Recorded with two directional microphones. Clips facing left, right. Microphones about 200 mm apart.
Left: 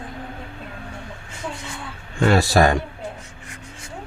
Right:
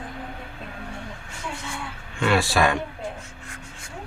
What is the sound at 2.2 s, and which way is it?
Speech, 40° left (ahead or behind).